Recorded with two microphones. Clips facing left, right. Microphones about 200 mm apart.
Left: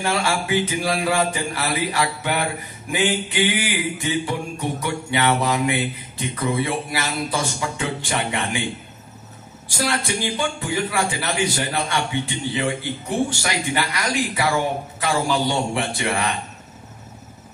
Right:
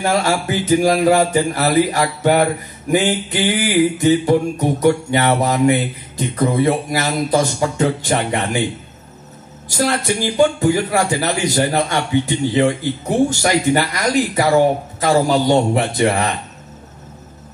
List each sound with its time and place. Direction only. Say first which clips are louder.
0.0 s speech: right 5 dB; 40° right (ahead or behind)
9.7 s speech: right 6 dB; 40° right (ahead or behind)